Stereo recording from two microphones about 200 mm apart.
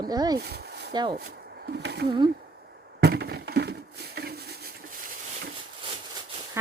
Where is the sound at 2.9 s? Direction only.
55° right (ahead or behind).